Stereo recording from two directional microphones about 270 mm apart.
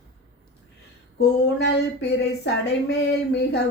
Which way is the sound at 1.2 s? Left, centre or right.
Left.